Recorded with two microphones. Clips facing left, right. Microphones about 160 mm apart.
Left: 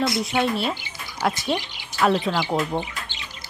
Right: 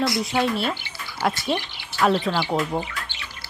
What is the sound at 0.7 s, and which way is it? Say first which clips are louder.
Speech: even; 15° left (ahead or behind).